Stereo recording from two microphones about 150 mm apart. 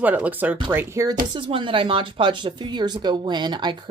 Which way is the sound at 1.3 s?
35° right (ahead or behind).